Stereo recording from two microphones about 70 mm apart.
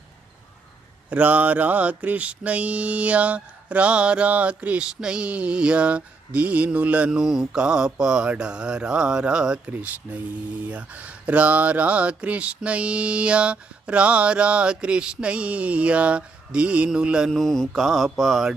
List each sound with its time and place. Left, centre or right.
1.1 s mantra: right
9.6 s mantra: right
17.3 s mantra: centre